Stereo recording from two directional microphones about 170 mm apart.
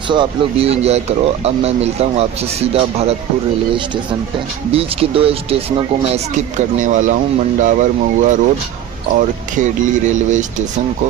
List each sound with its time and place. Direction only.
0.1 s speech: 30° right (ahead or behind)
4.7 s speech: 35° right (ahead or behind)
6.8 s speech: 45° right (ahead or behind)
9.6 s speech: 45° right (ahead or behind)